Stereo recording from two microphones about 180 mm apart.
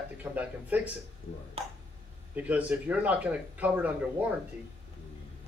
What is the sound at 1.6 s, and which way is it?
Speech, 30° right (ahead or behind).